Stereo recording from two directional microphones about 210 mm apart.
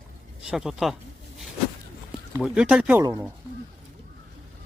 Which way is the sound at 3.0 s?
15° right (ahead or behind).